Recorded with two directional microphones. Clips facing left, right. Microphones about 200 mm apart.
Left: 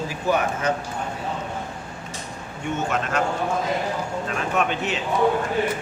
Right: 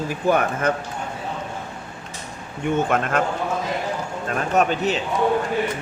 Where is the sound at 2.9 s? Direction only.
55° right (ahead or behind).